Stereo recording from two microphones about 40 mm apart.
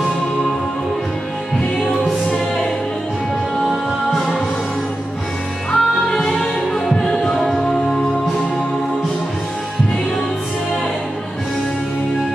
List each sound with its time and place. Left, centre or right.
5.7 s music: centre